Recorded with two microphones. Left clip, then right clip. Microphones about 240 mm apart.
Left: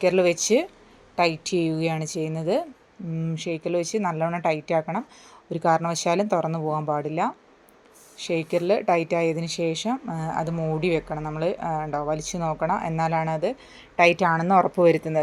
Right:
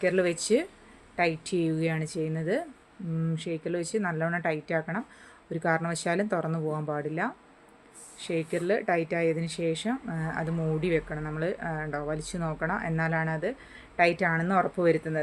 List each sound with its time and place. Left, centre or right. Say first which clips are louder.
0.0 s a woman's voice: left 6 dB; centre